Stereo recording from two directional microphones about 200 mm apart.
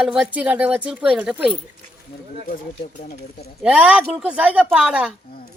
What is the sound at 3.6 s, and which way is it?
A woman's voice, 5° right (ahead or behind).